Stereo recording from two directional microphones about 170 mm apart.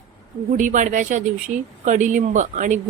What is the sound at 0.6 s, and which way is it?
A woman's voice, 50° right (ahead or behind).